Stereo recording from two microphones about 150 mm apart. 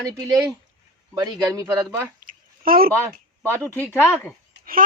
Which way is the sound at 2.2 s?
70° right (ahead or behind).